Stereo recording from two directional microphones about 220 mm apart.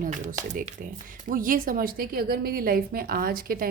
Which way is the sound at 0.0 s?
35° right (ahead or behind).